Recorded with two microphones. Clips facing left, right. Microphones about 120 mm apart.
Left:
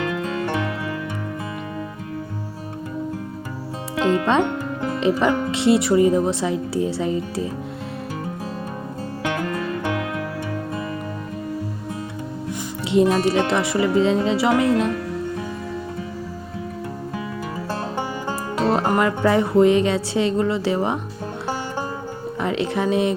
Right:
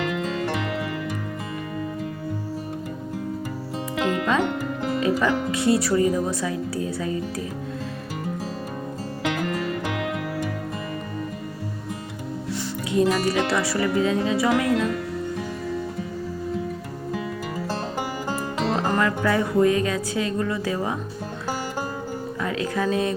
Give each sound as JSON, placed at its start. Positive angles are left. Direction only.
{"t": 4.0, "sound": "music", "side_deg": 25}
{"t": 4.9, "sound": "speech", "side_deg": 25}
{"t": 12.5, "sound": "speech", "side_deg": 20}
{"t": 18.9, "sound": "speech", "side_deg": 20}
{"t": 22.4, "sound": "speech", "side_deg": 25}